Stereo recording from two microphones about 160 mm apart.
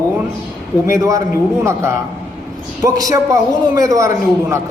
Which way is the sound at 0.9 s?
20° right (ahead or behind).